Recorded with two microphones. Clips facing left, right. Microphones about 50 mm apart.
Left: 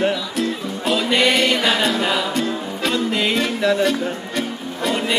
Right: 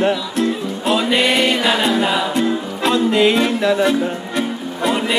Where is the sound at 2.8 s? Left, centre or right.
Centre.